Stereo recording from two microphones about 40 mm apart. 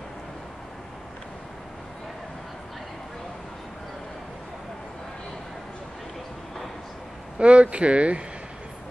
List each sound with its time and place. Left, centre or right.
7.3 s speech: right